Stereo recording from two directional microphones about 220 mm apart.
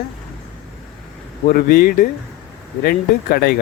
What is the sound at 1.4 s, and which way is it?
Speech, 40° left (ahead or behind).